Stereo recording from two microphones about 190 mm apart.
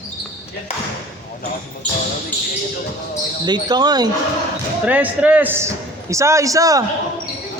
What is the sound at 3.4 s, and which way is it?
Speech, 20° right (ahead or behind).